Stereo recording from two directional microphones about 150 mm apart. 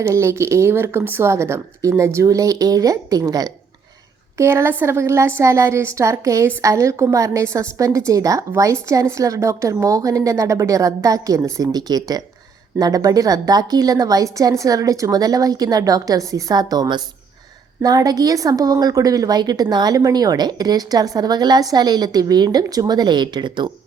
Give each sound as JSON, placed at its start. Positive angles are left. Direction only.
{"t": 0.0, "sound": "a woman's voice", "side_deg": -20}